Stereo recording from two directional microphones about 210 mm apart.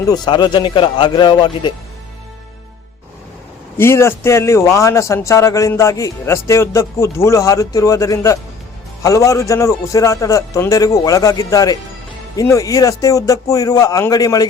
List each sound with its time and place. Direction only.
0.0 s a man's voice: 20° left (ahead or behind)
3.8 s a man's voice: 10° left (ahead or behind)